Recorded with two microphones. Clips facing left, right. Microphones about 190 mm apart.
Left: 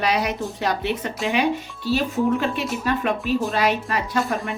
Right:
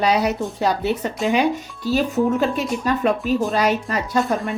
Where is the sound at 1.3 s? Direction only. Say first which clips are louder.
Right 2 dB; 40° right (ahead or behind).